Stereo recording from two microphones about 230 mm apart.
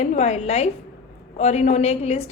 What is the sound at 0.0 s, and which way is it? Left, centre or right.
A woman's voice, left.